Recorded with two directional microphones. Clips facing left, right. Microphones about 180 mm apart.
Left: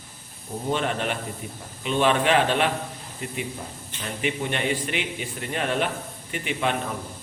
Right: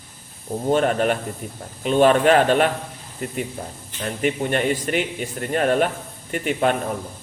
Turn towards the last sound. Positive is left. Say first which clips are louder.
# right 6 dB
turn(degrees=-45)  # may be behind; listen again after turning